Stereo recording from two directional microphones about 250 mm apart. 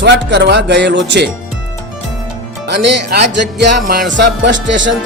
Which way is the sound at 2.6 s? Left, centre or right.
Right.